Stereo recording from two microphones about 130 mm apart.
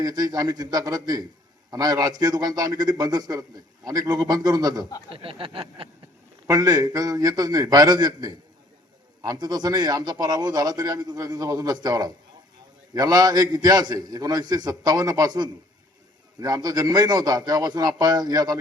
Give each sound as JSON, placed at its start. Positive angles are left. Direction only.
{"t": 0.0, "sound": "a man's voice", "side_deg": -30}
{"t": 5.1, "sound": "a sound", "side_deg": -45}
{"t": 6.5, "sound": "a man's voice", "side_deg": -25}